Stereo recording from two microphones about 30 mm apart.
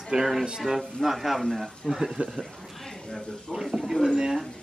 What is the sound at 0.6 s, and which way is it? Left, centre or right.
A woman's voice, centre.